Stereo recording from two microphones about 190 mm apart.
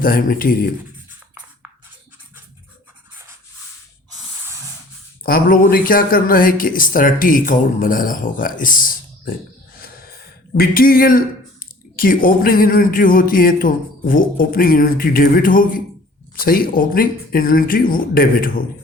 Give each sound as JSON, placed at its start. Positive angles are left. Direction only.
{"t": 0.0, "sound": "speech", "side_deg": 50}
{"t": 5.2, "sound": "speech", "side_deg": 50}
{"t": 9.8, "sound": "a sound", "side_deg": 50}
{"t": 11.6, "sound": "speech", "side_deg": 50}